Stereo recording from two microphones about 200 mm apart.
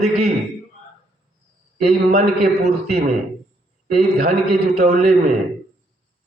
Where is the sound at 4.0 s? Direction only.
40° right (ahead or behind).